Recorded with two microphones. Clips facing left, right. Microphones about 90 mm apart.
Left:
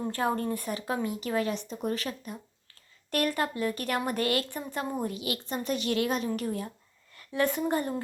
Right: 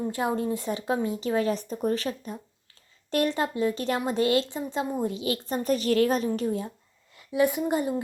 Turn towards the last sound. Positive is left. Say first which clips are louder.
# right 2 dB
turn(degrees=-15)  # may be behind; listen again after turning